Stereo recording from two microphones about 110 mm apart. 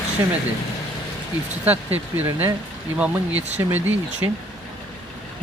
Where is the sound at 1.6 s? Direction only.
15° right (ahead or behind).